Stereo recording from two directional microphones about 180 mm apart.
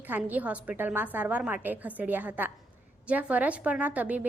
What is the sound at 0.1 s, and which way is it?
A woman's voice, 10° right (ahead or behind).